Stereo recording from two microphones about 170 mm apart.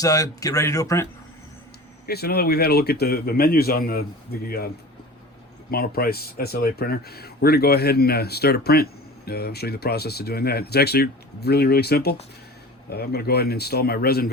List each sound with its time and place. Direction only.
0.0 s speech: 20° left (ahead or behind)
2.0 s speech: 65° left (ahead or behind)
5.7 s speech: 60° left (ahead or behind)